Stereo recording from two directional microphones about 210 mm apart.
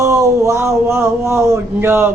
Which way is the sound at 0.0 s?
15° right (ahead or behind).